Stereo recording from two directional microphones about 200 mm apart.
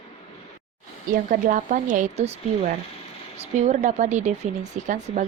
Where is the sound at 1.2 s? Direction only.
40° right (ahead or behind).